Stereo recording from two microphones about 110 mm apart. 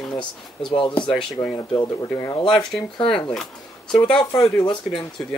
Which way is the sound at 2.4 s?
45° left (ahead or behind).